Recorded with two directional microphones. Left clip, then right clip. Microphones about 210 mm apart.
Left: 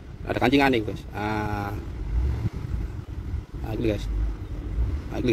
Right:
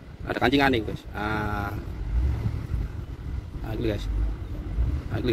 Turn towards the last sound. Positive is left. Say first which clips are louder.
# left 2 dB
turn(degrees=20)  # may be behind; listen again after turning